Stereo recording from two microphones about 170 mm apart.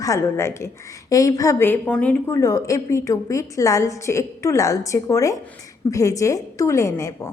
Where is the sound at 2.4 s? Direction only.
20° left (ahead or behind).